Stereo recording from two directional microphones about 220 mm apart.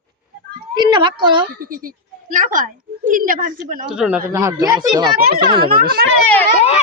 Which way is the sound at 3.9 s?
5° right (ahead or behind).